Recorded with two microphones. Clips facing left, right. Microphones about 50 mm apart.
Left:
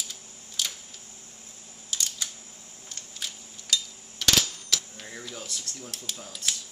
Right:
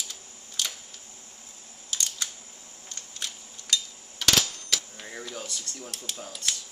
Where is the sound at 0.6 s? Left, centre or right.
Centre.